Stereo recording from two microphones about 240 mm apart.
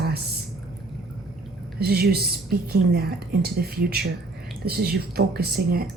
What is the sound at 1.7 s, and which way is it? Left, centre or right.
A woman's voice, right.